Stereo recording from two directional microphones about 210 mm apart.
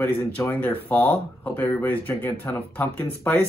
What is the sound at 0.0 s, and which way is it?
Speech, 10° left (ahead or behind).